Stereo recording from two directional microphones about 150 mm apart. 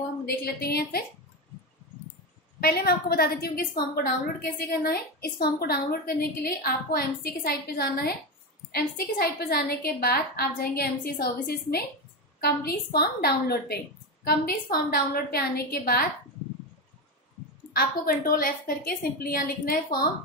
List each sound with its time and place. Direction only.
0.2 s a woman's voice: 90° left
2.6 s a woman's voice: 90° left
14.2 s a woman's voice: 80° left
17.7 s a woman's voice: 75° left (ahead or behind)